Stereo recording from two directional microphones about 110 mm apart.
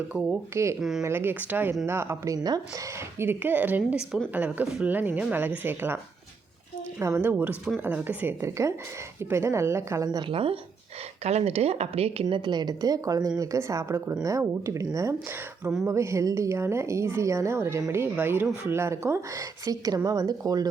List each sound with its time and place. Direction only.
0.5 s a woman's voice: 25° right (ahead or behind)
0.8 s speech: 5° right (ahead or behind)
1.0 s a woman's voice: 20° right (ahead or behind); by 2.6 s 35° right (ahead or behind)
3.2 s a woman's voice: 20° right (ahead or behind)
7.0 s a woman's voice: 20° right (ahead or behind)
10.2 s speech: 60° right (ahead or behind)
11.2 s speech: 75° right (ahead or behind)
12.5 s a woman's voice: 40° right (ahead or behind)
15.9 s a woman's voice: 25° right (ahead or behind)